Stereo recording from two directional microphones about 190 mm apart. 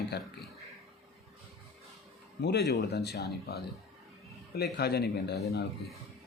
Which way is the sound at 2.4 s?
60° left (ahead or behind).